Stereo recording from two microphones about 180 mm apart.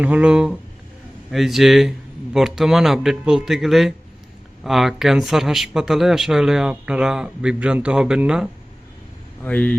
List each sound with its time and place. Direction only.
0.0 s speech: 5° right (ahead or behind)
9.4 s speech: 10° left (ahead or behind)